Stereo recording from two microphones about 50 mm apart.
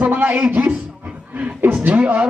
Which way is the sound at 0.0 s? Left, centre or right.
Right.